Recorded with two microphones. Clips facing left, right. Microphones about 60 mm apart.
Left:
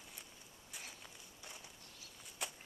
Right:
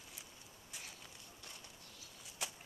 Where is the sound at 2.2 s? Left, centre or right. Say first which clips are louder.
Even; centre.